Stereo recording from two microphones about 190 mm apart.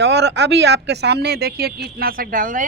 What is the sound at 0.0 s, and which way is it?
Speech, 65° right (ahead or behind).